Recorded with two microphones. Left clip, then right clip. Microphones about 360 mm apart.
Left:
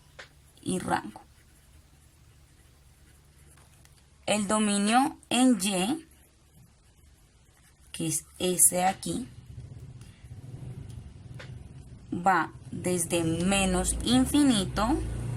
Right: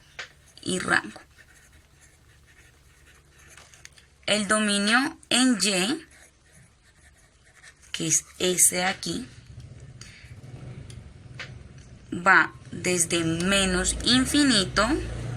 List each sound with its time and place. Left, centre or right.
0.6 s a sound: centre
3.8 s speech: left
8.4 s a woman's voice: left
12.2 s a woman's voice: centre